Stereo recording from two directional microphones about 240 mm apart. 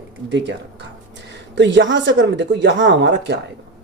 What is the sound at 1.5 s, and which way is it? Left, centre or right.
Speech, right.